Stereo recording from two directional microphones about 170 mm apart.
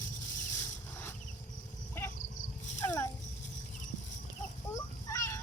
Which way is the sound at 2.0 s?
15° left (ahead or behind).